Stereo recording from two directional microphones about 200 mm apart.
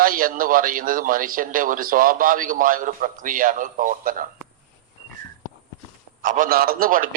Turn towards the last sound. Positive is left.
turn(degrees=-45)  # may be behind; listen again after turning